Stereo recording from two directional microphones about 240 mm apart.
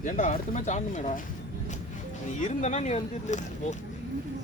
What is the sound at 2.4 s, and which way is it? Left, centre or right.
Speech, left.